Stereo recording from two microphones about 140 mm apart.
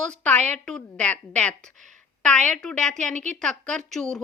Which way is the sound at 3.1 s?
60° right (ahead or behind).